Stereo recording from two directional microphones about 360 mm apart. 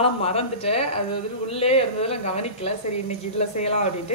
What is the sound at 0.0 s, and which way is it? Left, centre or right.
A woman's voice, centre.